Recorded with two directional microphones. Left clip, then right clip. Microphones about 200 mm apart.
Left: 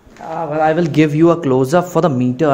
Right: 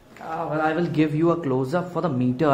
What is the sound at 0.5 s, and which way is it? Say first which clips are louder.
A man's voice: left 9 dB; 35° left (ahead or behind).